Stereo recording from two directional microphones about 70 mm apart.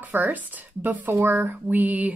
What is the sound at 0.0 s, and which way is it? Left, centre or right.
Speech, right.